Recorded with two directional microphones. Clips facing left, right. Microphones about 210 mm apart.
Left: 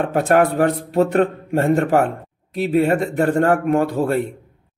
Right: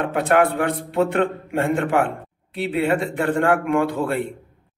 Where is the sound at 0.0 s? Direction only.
40° left (ahead or behind).